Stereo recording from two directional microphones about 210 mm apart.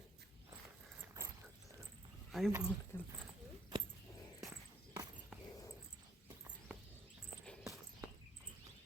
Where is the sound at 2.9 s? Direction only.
10° left (ahead or behind).